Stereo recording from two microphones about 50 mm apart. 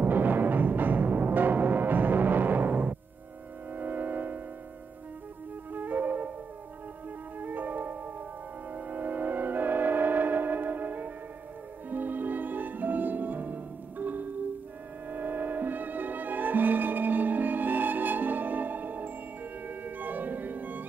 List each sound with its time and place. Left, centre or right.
0.0 s timpani: right
3.7 s theremin: right
5.7 s flute: right
7.3 s music: right